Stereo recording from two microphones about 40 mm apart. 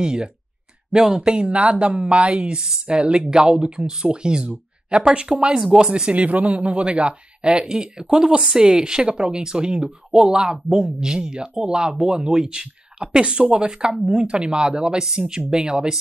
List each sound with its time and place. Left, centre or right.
0.0 s speech: right
1.3 s speech: right
6.1 s speech: right; by 16.0 s centre